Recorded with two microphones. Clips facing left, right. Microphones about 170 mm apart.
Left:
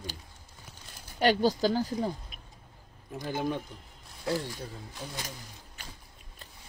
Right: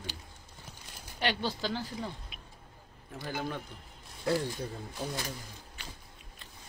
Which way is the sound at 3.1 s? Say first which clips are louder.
Left 5 dB; 15° left (ahead or behind).